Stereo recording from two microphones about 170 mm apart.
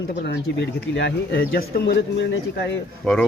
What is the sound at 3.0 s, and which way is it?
Speech, 5° left (ahead or behind).